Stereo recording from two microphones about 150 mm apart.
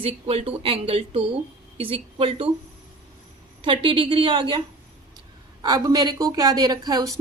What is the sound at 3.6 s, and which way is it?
Speech, 35° right (ahead or behind).